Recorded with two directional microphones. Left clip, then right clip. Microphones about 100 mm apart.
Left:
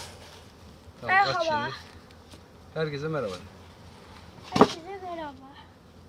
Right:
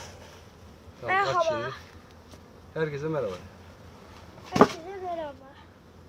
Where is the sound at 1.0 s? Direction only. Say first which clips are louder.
Left 1 dB; 45° right (ahead or behind).